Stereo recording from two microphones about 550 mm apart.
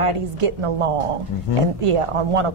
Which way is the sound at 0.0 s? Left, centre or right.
Right.